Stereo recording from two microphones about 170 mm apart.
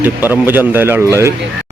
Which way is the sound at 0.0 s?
10° right (ahead or behind).